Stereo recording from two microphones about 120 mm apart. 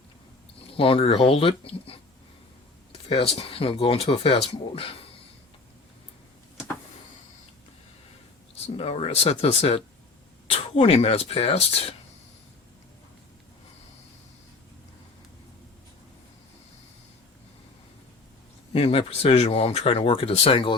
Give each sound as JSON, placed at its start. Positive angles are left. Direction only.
{"t": 0.7, "sound": "speech", "side_deg": 50}
{"t": 3.3, "sound": "speech", "side_deg": 50}
{"t": 8.6, "sound": "speech", "side_deg": 55}
{"t": 18.7, "sound": "speech", "side_deg": 55}